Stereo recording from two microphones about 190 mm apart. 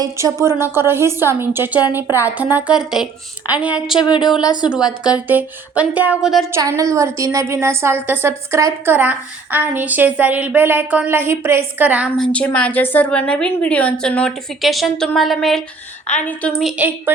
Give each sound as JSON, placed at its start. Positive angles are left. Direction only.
{"t": 0.0, "sound": "a woman's voice", "side_deg": -15}
{"t": 3.9, "sound": "a sound", "side_deg": 25}
{"t": 5.0, "sound": "a woman's voice", "side_deg": -5}
{"t": 6.5, "sound": "a woman's voice", "side_deg": -15}